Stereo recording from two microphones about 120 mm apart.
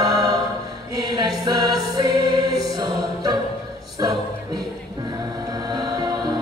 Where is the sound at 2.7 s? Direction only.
35° right (ahead or behind).